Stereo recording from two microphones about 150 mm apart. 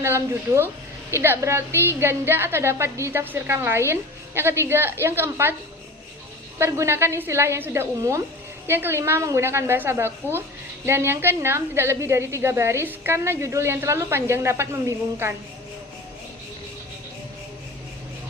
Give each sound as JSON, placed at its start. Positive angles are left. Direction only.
{"t": 0.0, "sound": "a woman's voice", "side_deg": -15}
{"t": 6.6, "sound": "a woman's voice", "side_deg": -20}